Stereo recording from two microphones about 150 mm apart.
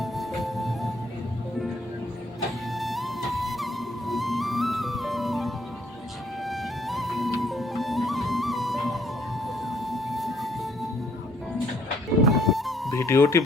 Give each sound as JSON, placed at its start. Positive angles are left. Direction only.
{"t": 0.0, "sound": "music", "side_deg": 0}
{"t": 2.7, "sound": "music", "side_deg": 0}
{"t": 9.6, "sound": "a sound", "side_deg": 0}
{"t": 12.2, "sound": "music", "side_deg": 0}
{"t": 12.9, "sound": "speech", "side_deg": 20}